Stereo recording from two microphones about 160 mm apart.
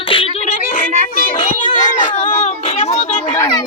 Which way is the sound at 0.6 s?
55° left (ahead or behind).